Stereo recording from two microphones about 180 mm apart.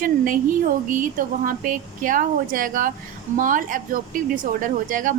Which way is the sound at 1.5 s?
50° right (ahead or behind).